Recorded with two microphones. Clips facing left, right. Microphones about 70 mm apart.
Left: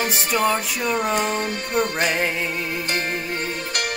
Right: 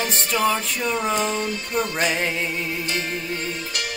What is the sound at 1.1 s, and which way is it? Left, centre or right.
Music, left.